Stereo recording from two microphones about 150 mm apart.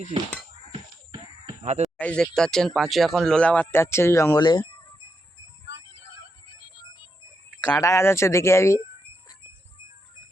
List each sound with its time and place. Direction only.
0.7 s a sound: 30° right (ahead or behind)
1.6 s speech: 50° right (ahead or behind)
2.0 s speech: 5° left (ahead or behind)
4.4 s speech: 30° left (ahead or behind)
7.8 s speech: 20° left (ahead or behind)